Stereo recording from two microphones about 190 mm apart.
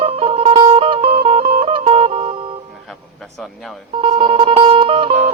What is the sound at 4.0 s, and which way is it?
Music, 30° right (ahead or behind).